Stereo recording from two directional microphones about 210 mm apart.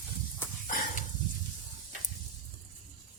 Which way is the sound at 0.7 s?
40° left (ahead or behind).